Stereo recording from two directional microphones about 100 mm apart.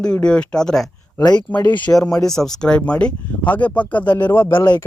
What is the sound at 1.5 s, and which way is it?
Speech, 20° left (ahead or behind).